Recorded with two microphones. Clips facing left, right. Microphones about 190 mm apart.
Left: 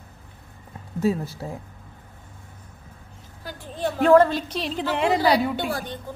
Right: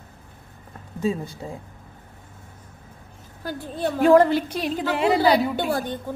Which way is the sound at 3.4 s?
45° right (ahead or behind).